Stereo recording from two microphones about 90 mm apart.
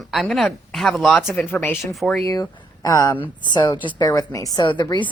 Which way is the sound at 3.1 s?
65° left (ahead or behind).